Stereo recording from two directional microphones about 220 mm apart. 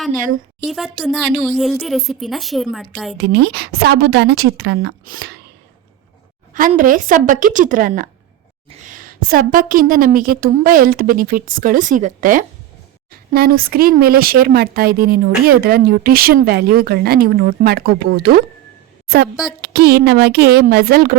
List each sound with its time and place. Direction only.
0.6 s speech: centre (ahead or behind)
3.2 s speech: 50° right (ahead or behind)
6.5 s a woman's voice: 35° right (ahead or behind)